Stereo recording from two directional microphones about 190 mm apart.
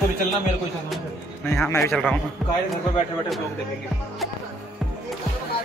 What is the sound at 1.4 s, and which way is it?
Speech, 10° left (ahead or behind).